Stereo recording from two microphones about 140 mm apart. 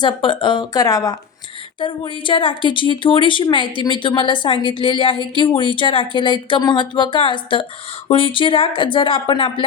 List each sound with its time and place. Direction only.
0.0 s speech: 35° left (ahead or behind)
1.8 s speech: 35° left (ahead or behind)